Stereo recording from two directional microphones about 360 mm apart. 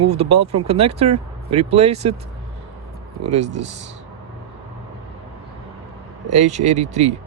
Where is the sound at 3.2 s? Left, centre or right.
Centre.